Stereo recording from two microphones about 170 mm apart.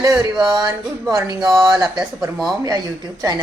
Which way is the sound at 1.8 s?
5° right (ahead or behind).